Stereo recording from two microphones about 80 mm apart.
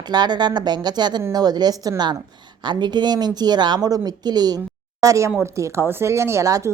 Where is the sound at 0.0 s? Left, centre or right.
Right.